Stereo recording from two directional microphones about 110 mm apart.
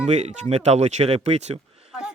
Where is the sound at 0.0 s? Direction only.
90° right.